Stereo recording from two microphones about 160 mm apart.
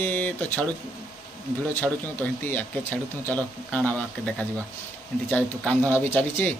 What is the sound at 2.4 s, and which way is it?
A man's voice, 10° left (ahead or behind).